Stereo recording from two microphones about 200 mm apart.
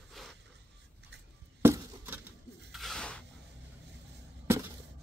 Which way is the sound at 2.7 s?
Centre (ahead or behind).